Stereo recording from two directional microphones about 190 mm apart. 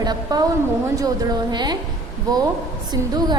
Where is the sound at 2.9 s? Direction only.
20° right (ahead or behind).